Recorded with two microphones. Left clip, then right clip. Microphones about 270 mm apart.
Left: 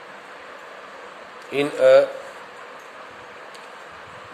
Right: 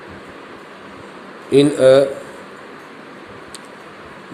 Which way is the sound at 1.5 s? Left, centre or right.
Centre.